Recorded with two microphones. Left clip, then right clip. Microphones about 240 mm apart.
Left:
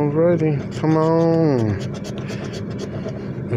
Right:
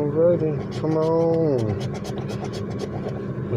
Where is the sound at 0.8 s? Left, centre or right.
Left.